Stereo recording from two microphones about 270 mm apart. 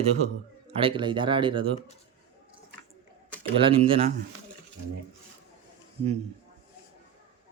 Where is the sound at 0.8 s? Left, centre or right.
Centre.